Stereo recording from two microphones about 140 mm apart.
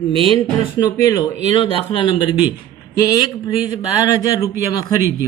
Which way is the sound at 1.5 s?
40° left (ahead or behind).